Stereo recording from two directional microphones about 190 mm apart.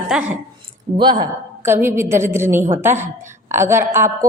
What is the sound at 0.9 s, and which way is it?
Speech, 25° right (ahead or behind).